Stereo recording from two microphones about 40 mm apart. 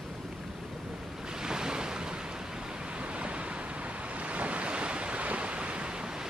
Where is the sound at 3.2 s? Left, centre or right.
Right.